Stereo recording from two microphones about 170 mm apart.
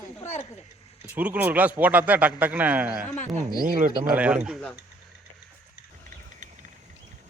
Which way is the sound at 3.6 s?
50° right (ahead or behind).